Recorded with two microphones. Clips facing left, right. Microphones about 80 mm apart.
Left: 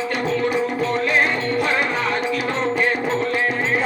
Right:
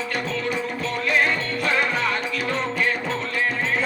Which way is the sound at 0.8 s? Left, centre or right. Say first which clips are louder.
Left 1 dB; left.